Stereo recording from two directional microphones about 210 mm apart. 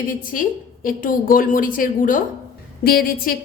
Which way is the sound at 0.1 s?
40° left (ahead or behind).